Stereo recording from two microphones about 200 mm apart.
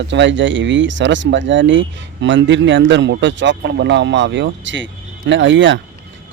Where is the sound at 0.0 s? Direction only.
65° right (ahead or behind).